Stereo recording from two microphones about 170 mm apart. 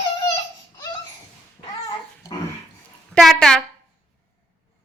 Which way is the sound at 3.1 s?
Centre (ahead or behind).